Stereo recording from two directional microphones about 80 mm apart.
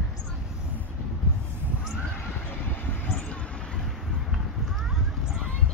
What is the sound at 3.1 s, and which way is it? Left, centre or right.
Vehicle, centre.